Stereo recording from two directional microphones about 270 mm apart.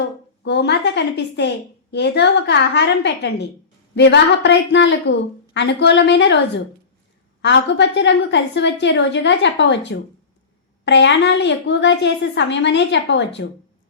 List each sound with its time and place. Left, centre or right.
0.4 s a woman's voice: left
7.4 s a woman's voice: left